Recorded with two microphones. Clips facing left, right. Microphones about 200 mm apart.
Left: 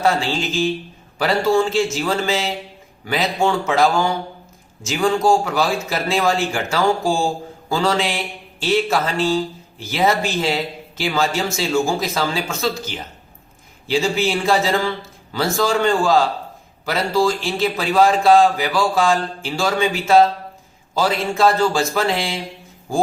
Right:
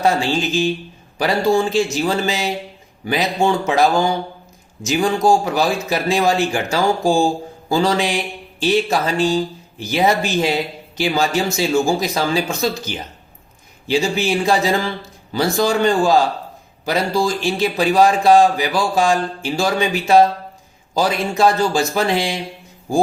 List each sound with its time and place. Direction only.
0.0 s a man's voice: 15° right (ahead or behind)
13.8 s a man's voice: 15° right (ahead or behind)